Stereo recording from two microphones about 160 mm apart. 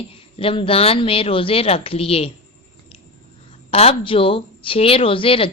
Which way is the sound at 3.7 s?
40° left (ahead or behind).